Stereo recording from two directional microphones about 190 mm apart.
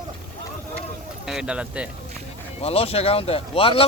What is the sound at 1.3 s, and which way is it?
Speech, 5° right (ahead or behind).